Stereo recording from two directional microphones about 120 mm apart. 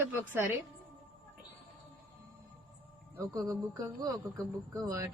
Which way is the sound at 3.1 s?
25° right (ahead or behind).